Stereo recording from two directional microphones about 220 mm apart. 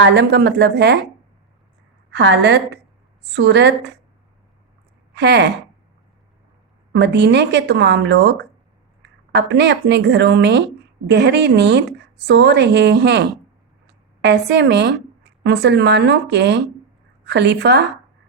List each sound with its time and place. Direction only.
0.0 s a woman's voice: 50° right (ahead or behind)
2.1 s a woman's voice: 55° right (ahead or behind)
5.1 s a woman's voice: 50° right (ahead or behind)
6.9 s a woman's voice: 50° right (ahead or behind)
13.8 s a sound: 50° right (ahead or behind)
15.2 s a woman's voice: 50° right (ahead or behind)